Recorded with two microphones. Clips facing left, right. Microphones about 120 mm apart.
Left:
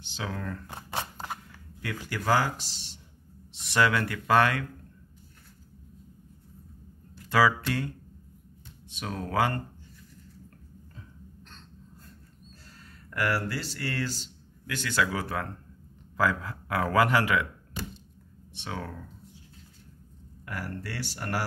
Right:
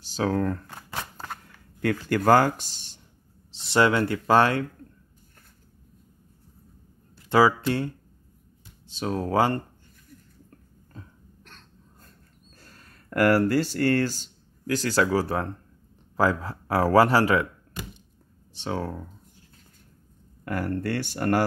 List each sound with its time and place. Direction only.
0.0 s speech: 40° right (ahead or behind)
0.7 s shuffling cards: 20° left (ahead or behind)
2.0 s speech: 50° right (ahead or behind)
3.5 s speech: 30° right (ahead or behind)
7.2 s speech: 30° right (ahead or behind)
13.1 s speech: 50° right (ahead or behind); by 17.5 s 35° right (ahead or behind)
18.5 s speech: 35° right (ahead or behind)
20.4 s speech: 50° right (ahead or behind)